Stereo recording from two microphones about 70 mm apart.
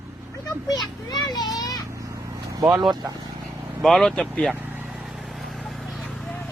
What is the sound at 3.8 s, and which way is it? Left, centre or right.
Speech, centre.